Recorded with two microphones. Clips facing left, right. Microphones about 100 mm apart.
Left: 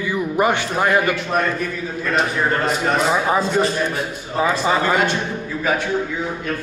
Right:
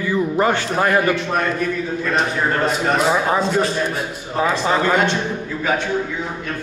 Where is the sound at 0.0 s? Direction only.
15° left (ahead or behind).